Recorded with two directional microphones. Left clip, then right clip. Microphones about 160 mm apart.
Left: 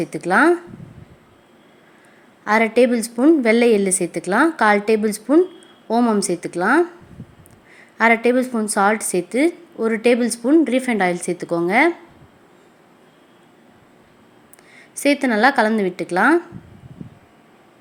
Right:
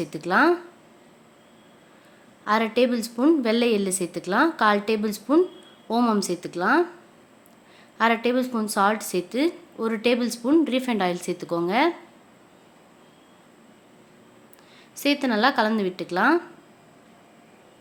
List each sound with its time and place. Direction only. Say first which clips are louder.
0.0 s a woman's voice: left 5 dB; 20° left (ahead or behind)
2.4 s a woman's voice: left 6 dB; 20° left (ahead or behind)
7.9 s a woman's voice: left 6 dB; 20° left (ahead or behind)
14.8 s a woman's voice: left 6 dB; 20° left (ahead or behind)